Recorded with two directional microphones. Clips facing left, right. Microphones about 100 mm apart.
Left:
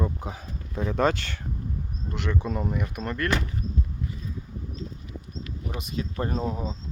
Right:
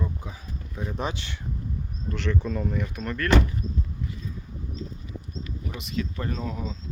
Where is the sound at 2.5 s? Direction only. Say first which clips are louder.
Even; 25° left (ahead or behind).